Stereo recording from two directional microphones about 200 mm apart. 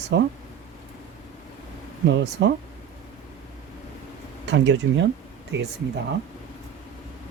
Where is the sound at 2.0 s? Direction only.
60° right (ahead or behind).